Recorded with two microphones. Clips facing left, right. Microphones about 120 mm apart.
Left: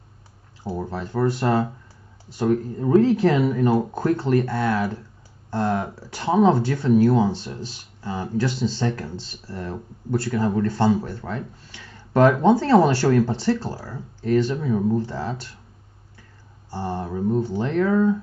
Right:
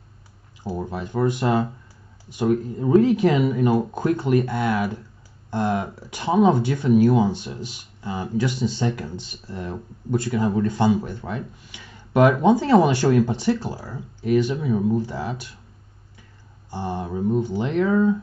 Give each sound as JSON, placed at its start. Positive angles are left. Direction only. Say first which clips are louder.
{"t": 0.8, "sound": "speech", "louder": "even", "side_deg": -15}
{"t": 16.7, "sound": "speech", "louder": "even", "side_deg": -15}